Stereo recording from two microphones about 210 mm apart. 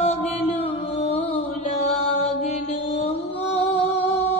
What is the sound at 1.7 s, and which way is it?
Mantra, 30° left (ahead or behind).